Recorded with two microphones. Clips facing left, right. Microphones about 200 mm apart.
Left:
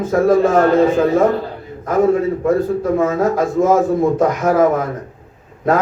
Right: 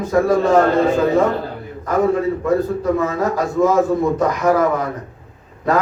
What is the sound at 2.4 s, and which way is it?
A man's voice, 50° left (ahead or behind).